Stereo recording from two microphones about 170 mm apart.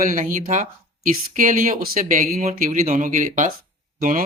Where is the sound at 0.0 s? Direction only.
55° right (ahead or behind).